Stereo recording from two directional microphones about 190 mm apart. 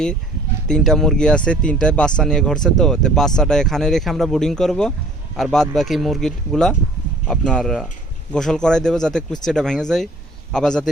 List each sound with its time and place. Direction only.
0.7 s speech: centre (ahead or behind)